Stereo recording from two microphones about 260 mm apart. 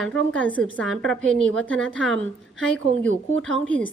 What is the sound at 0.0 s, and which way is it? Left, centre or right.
A woman's voice, centre.